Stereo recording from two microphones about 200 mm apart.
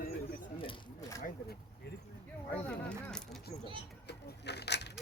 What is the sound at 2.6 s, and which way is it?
Speech, 5° left (ahead or behind).